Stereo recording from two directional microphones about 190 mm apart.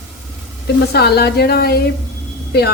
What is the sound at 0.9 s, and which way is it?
Speech, 60° left (ahead or behind).